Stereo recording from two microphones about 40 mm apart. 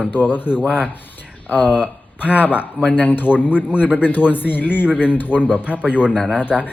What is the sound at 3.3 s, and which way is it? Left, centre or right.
Speech, right.